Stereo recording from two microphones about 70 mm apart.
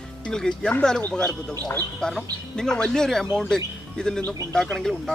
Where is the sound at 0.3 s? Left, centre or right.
Centre.